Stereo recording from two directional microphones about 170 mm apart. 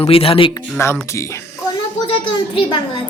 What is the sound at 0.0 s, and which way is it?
Speech, 35° left (ahead or behind).